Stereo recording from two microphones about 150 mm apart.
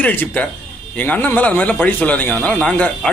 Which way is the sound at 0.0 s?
10° left (ahead or behind).